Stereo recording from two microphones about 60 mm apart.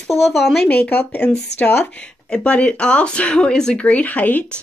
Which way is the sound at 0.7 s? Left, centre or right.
Left.